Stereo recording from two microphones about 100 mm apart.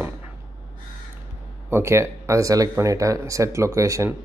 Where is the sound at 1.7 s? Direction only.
25° right (ahead or behind).